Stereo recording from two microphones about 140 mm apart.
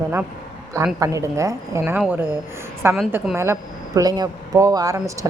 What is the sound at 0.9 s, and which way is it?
A woman's voice, 20° right (ahead or behind).